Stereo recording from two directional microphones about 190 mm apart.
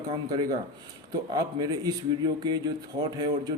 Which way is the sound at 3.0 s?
20° right (ahead or behind).